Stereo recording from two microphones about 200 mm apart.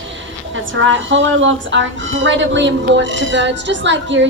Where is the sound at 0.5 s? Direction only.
70° right (ahead or behind).